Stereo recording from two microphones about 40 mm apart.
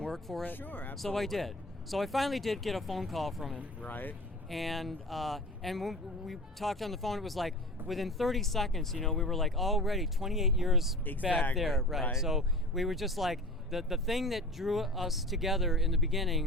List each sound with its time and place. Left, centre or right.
0.1 s speech: centre
0.4 s speech: left
0.9 s speech: centre
3.8 s speech: left
4.4 s speech: centre